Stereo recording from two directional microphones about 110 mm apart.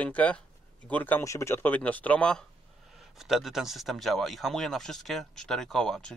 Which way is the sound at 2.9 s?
5° right (ahead or behind).